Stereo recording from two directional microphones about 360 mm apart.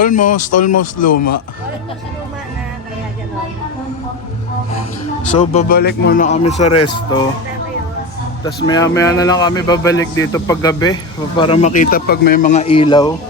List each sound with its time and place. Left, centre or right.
0.0 s speech: left
0.5 s speech: left
5.2 s speech: left
8.6 s speech: centre